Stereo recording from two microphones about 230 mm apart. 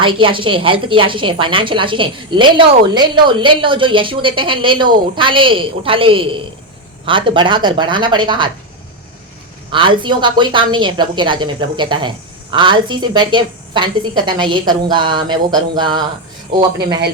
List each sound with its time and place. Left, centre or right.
0.0 s a woman's voice: right
9.7 s a woman's voice: right